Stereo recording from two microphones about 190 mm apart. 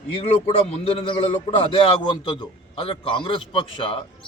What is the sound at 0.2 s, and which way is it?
A man's voice, 35° left (ahead or behind).